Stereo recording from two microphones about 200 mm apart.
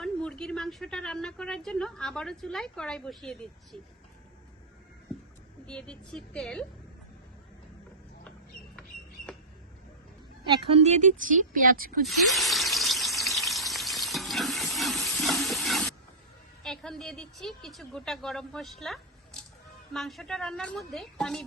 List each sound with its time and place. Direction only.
0.0 s speech: 5° left (ahead or behind)
5.6 s speech: 5° left (ahead or behind)
9.3 s bird: 5° left (ahead or behind)
10.5 s speech: 30° right (ahead or behind)
12.0 s a sound: centre (ahead or behind)
16.6 s a woman's voice: centre (ahead or behind)